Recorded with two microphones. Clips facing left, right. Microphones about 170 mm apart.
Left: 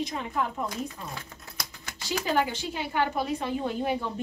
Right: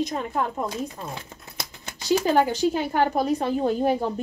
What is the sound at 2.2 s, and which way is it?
A woman's voice, 40° right (ahead or behind).